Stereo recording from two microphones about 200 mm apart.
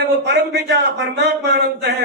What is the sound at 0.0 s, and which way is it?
A man's voice, 60° right (ahead or behind).